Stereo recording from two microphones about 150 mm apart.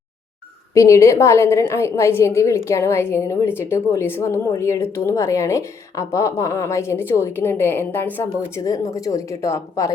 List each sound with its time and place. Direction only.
0.7 s a woman's voice: 20° left (ahead or behind)